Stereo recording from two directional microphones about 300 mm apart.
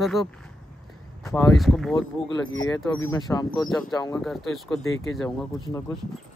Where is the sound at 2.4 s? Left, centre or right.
Left.